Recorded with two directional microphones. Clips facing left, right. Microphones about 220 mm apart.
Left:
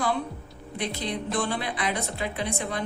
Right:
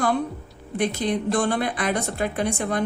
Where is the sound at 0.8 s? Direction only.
50° right (ahead or behind).